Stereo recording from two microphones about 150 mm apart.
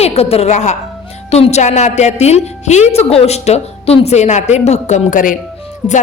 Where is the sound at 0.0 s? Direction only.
45° left (ahead or behind).